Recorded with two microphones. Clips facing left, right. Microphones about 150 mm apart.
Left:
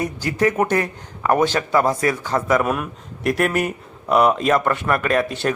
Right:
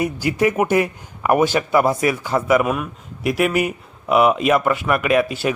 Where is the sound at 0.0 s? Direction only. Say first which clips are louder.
Right 1 dB; 10° right (ahead or behind).